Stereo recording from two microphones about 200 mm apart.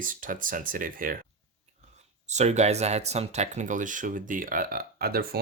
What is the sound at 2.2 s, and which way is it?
Speech, 35° right (ahead or behind).